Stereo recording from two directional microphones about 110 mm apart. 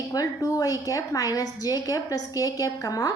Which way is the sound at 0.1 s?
35° left (ahead or behind).